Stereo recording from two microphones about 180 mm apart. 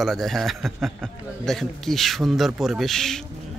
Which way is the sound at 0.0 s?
Centre (ahead or behind).